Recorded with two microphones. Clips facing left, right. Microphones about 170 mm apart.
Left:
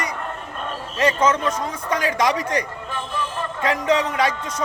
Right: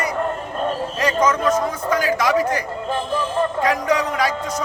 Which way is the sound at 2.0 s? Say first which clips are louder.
Right 2 dB; 30° right (ahead or behind).